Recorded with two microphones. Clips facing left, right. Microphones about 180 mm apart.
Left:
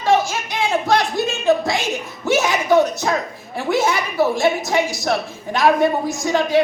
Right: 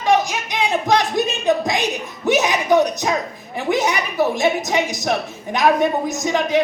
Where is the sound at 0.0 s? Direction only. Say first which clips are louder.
Even; 15° right (ahead or behind).